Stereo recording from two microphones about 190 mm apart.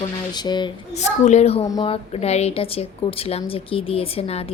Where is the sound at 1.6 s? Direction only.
20° left (ahead or behind).